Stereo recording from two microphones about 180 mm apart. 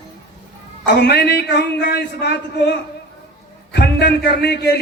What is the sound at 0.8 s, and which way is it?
A man's voice, 70° left (ahead or behind).